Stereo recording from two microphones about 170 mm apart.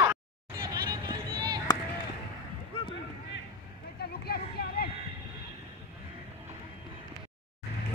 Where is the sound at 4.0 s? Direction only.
70° left (ahead or behind).